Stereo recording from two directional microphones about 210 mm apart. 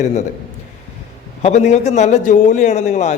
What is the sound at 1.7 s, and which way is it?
A man's voice, 35° left (ahead or behind).